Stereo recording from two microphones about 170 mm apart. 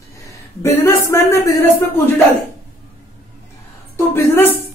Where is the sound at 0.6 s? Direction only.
15° left (ahead or behind).